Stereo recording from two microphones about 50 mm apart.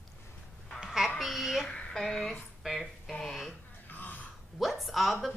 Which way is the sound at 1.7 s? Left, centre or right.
Centre.